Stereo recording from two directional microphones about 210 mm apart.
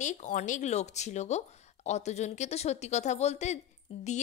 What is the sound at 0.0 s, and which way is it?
A woman's voice, 35° left (ahead or behind).